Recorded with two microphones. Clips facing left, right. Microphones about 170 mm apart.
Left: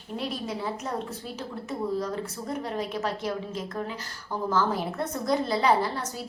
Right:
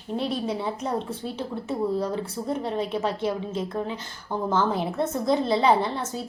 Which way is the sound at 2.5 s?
30° right (ahead or behind).